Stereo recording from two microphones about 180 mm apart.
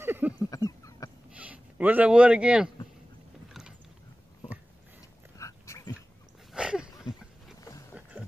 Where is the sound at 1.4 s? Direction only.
10° right (ahead or behind).